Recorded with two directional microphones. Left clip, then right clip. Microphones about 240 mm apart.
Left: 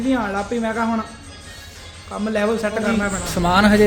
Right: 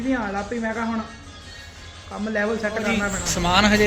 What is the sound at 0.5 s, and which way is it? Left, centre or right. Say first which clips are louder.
Speech: left 5 dB; centre.